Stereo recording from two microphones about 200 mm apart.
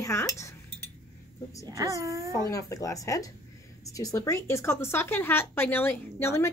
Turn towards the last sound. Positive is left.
turn(degrees=15)  # may be behind; listen again after turning